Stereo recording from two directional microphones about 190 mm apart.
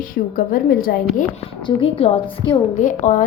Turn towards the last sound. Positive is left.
turn(degrees=40)  # may be behind; listen again after turning